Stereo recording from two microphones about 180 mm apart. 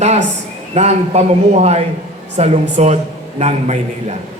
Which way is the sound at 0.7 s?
35° right (ahead or behind).